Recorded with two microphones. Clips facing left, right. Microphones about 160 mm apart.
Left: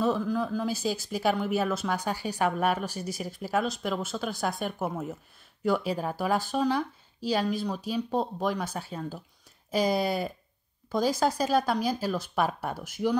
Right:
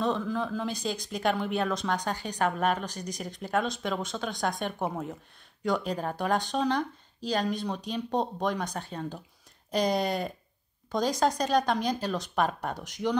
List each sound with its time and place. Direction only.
0.0 s speech: 5° left (ahead or behind)